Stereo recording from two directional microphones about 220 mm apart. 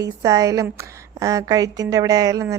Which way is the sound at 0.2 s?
15° right (ahead or behind).